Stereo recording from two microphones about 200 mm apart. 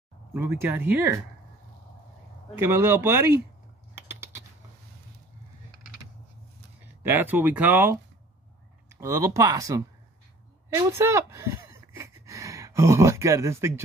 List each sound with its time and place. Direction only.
0.3 s speech: 10° right (ahead or behind)
2.5 s speech: 15° right (ahead or behind)
7.0 s speech: 10° right (ahead or behind)
9.0 s speech: 15° right (ahead or behind)
10.7 s a sound: 15° right (ahead or behind)